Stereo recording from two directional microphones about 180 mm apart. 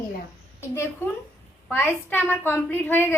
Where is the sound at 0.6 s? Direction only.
15° left (ahead or behind).